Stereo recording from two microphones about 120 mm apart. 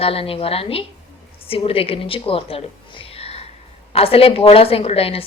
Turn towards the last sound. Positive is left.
turn(degrees=55)  # may be behind; listen again after turning